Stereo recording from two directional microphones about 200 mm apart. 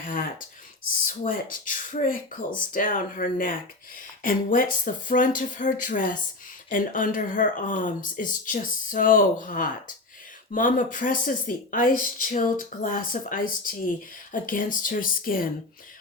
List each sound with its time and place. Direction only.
0.1 s speech: 45° left (ahead or behind)